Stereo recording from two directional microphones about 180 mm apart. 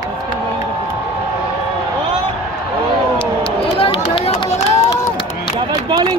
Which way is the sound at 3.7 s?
30° left (ahead or behind).